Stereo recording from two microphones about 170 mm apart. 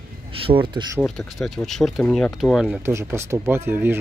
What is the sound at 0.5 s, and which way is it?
Speech, 30° right (ahead or behind).